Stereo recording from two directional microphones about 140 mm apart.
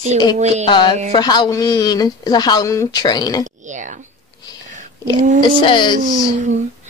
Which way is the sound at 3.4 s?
60° right (ahead or behind).